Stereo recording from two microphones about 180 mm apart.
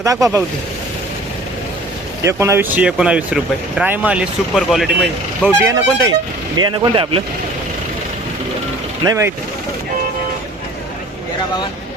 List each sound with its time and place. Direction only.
0.0 s speech: 20° right (ahead or behind)
2.2 s speech: 15° right (ahead or behind)
5.5 s speech: 15° right (ahead or behind)
6.6 s speech: 25° right (ahead or behind)
9.0 s speech: 15° right (ahead or behind)